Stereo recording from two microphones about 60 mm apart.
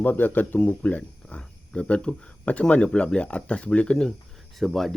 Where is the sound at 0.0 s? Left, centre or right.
Left.